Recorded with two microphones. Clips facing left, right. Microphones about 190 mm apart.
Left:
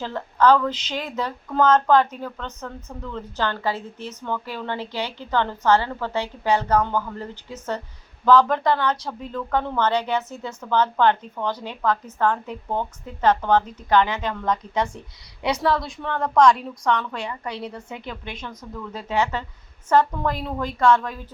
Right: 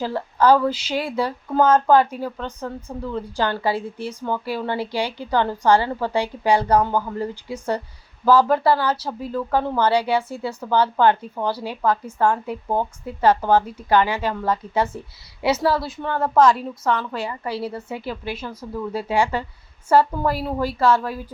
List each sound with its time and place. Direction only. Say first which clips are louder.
0.0 s speech: right 1 dB; 10° right (ahead or behind)